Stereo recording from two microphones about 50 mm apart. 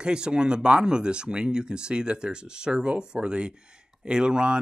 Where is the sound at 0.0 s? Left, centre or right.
Centre.